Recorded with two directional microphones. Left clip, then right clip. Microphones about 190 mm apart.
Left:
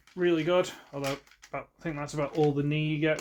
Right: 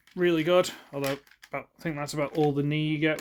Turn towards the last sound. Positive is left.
turn(degrees=-65)  # may be behind; listen again after turning